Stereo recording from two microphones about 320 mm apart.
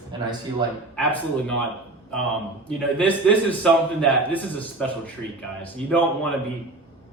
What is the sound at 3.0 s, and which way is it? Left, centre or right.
A man's voice, centre.